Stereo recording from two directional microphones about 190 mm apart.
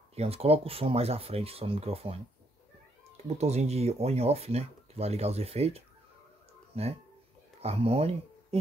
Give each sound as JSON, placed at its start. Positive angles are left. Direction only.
{"t": 0.1, "sound": "speech", "side_deg": -30}
{"t": 3.3, "sound": "speech", "side_deg": -35}